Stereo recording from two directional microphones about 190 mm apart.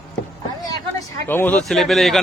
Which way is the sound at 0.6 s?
15° left (ahead or behind).